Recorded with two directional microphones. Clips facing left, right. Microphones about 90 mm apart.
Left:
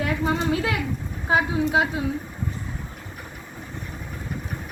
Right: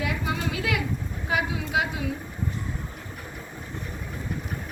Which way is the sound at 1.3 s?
35° left (ahead or behind).